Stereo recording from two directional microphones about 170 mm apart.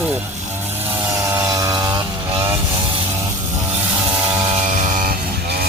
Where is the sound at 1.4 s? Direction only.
20° right (ahead or behind).